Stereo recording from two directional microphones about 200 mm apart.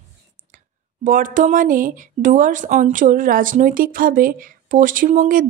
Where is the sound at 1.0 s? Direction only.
40° right (ahead or behind).